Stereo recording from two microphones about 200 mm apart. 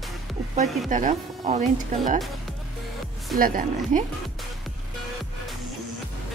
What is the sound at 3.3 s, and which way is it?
Speech, 45° right (ahead or behind).